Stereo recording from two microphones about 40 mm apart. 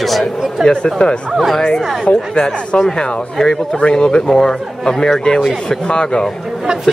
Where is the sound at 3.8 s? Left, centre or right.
Left.